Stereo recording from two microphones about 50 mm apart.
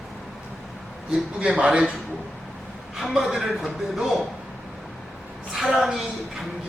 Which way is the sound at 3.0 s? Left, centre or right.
Centre.